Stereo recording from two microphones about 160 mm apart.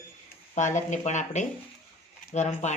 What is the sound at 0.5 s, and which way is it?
Speech, 50° left (ahead or behind).